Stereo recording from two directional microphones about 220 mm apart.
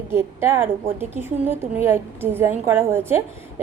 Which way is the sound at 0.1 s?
10° right (ahead or behind).